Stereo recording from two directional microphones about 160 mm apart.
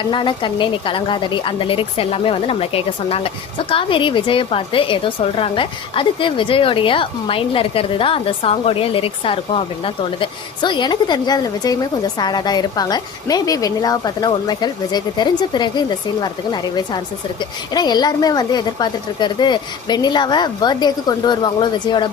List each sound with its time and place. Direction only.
0.0 s a woman's voice: 30° left (ahead or behind)